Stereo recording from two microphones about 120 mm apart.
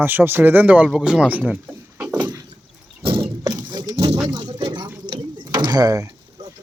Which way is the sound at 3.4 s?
35° right (ahead or behind).